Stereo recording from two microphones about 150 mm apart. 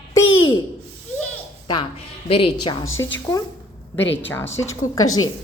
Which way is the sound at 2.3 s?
40° left (ahead or behind).